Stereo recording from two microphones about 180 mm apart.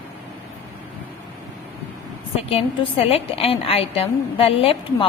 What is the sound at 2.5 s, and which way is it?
A woman's voice, 35° left (ahead or behind).